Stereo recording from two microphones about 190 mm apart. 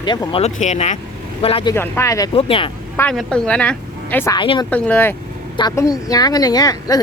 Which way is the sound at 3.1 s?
Centre (ahead or behind).